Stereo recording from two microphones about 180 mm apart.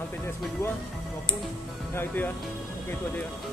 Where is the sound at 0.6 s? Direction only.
15° left (ahead or behind).